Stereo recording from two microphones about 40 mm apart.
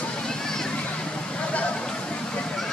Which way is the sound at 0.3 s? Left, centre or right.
Centre.